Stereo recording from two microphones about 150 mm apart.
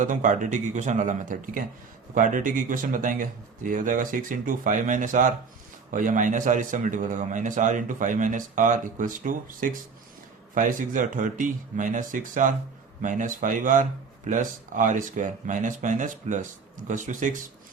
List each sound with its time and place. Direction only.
0.0 s a man's voice: 60° right (ahead or behind)